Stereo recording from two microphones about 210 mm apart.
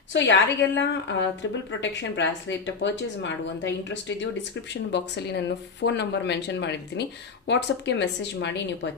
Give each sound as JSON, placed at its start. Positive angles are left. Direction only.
{"t": 0.1, "sound": "a woman's voice", "side_deg": 60}